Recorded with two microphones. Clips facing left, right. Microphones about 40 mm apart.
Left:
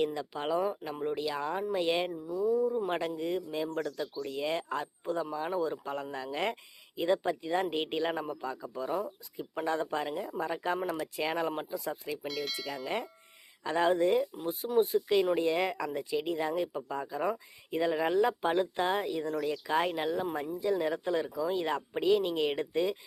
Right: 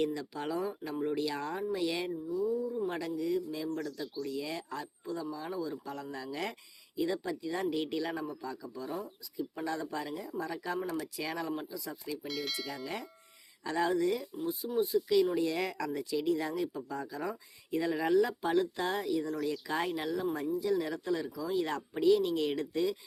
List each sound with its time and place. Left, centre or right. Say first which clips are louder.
0.0 s speech: left 2 dB; left
1.7 s speech: left 4 dB; left
2.2 s speech: left 4 dB; left
3.2 s speech: even; left
12.3 s speech: even; centre
13.7 s speech: left 3 dB; left
15.4 s speech: left 4 dB; left